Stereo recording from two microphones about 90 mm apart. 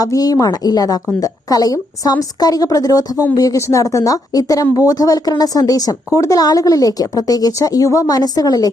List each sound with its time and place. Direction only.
0.0 s a woman's voice: 45° left (ahead or behind)